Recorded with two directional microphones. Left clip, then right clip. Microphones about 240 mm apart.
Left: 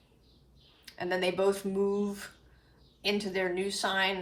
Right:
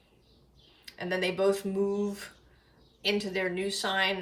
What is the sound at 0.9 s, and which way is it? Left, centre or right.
Speech, centre.